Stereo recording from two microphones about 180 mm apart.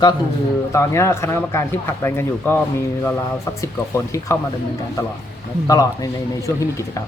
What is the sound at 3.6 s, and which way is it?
Speech, 15° left (ahead or behind).